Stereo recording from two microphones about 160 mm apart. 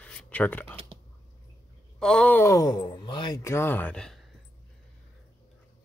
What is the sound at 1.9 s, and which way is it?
Speech, 5° left (ahead or behind).